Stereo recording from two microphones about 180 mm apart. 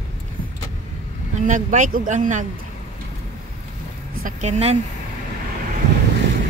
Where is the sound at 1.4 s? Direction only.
45° right (ahead or behind).